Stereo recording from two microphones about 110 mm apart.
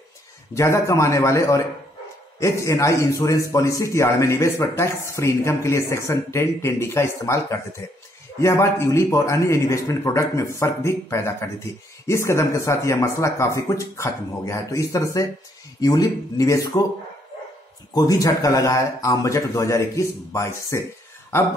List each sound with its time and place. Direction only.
0.6 s a man's voice: 25° left (ahead or behind)
17.9 s a man's voice: 30° left (ahead or behind)